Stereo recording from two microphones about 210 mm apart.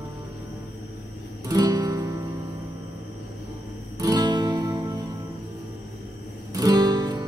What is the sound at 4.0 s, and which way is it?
Music, 20° right (ahead or behind).